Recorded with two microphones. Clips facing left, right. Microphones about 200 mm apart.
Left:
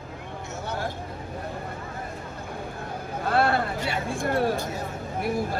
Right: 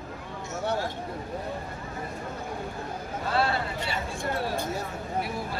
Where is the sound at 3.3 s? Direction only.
55° left (ahead or behind).